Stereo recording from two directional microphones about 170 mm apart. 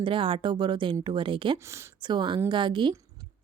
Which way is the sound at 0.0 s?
30° right (ahead or behind).